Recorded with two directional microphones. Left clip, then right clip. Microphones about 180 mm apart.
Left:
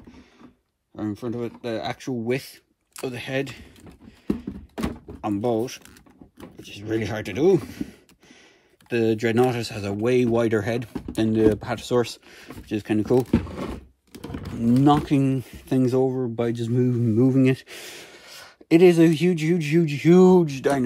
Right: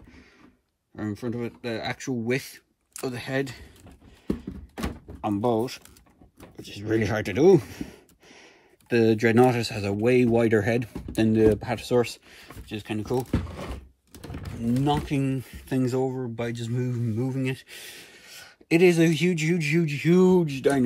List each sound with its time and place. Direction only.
1.2 s speech: 5° left (ahead or behind)
3.2 s a man's voice: 35° right (ahead or behind)
5.2 s speech: 5° left (ahead or behind)
10.9 s a sound: 15° left (ahead or behind)
11.2 s speech: centre (ahead or behind)
11.6 s speech: 70° left (ahead or behind)
12.0 s speech: 20° left (ahead or behind)
14.1 s typing: 35° left (ahead or behind)
15.2 s speech: 20° left (ahead or behind)